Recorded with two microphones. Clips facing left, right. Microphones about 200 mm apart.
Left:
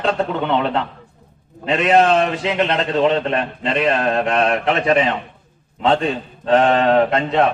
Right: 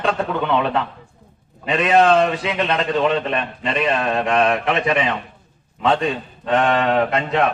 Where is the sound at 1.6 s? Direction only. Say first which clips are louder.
Left 1 dB; 30° left (ahead or behind).